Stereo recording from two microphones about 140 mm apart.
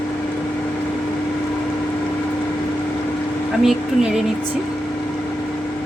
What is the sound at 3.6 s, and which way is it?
Speech, 5° right (ahead or behind).